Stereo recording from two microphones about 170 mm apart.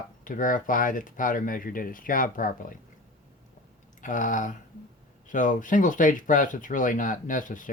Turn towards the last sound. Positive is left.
turn(degrees=50)  # may be behind; listen again after turning